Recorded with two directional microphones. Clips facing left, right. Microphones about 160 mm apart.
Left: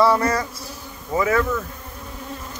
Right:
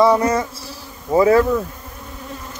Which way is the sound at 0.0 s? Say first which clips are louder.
Right 3 dB; 20° right (ahead or behind).